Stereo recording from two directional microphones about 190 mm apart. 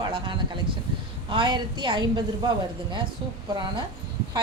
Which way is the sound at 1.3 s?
25° right (ahead or behind).